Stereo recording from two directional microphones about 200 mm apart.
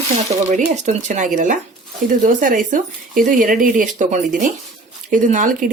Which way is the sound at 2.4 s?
40° right (ahead or behind).